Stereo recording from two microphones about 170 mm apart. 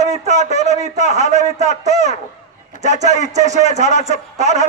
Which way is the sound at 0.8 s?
40° right (ahead or behind).